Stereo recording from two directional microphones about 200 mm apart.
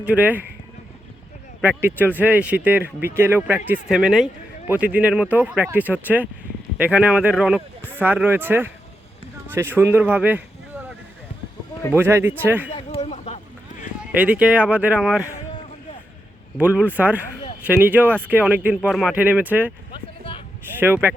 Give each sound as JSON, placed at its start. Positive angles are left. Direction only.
{"t": 0.0, "sound": "speech", "side_deg": -5}
{"t": 1.6, "sound": "speech", "side_deg": -10}
{"t": 11.9, "sound": "speech", "side_deg": -10}
{"t": 12.7, "sound": "a sound", "side_deg": 30}
{"t": 14.2, "sound": "speech", "side_deg": -5}
{"t": 16.6, "sound": "speech", "side_deg": -10}
{"t": 19.9, "sound": "a sound", "side_deg": 25}
{"t": 20.7, "sound": "speech", "side_deg": -10}